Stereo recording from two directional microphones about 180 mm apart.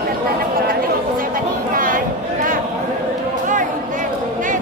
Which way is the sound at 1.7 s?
50° right (ahead or behind).